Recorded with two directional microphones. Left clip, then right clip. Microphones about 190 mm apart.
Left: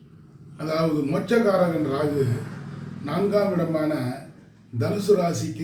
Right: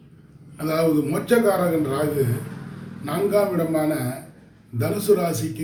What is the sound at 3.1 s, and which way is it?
A man's voice, 15° right (ahead or behind).